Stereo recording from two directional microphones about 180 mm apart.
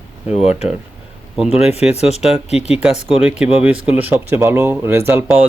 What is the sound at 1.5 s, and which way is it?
Speech, 35° left (ahead or behind).